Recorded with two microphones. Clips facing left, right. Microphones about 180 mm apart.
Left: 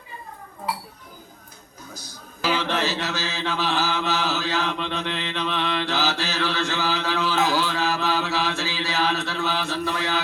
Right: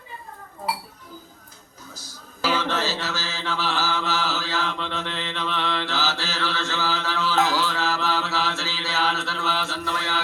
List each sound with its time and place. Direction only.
2.6 s mantra: 15° left (ahead or behind)